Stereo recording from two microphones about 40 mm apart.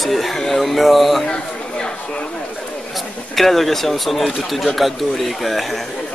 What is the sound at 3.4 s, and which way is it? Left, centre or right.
Speech, centre.